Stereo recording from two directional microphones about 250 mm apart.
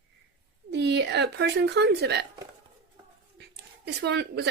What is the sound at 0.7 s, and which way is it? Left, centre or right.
Speech, right.